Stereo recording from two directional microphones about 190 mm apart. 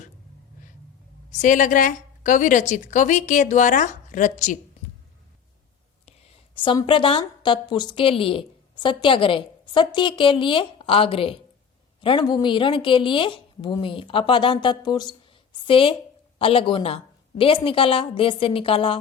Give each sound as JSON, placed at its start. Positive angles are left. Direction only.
{"t": 1.3, "sound": "a woman's voice", "side_deg": 40}
{"t": 6.1, "sound": "a woman's voice", "side_deg": 30}